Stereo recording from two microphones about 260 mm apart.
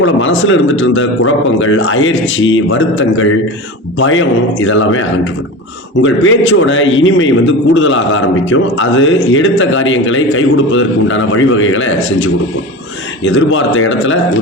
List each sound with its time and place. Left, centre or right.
0.0 s a man's voice: left